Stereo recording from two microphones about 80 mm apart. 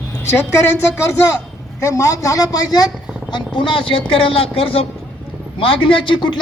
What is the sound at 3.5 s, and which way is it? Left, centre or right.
Speech, left.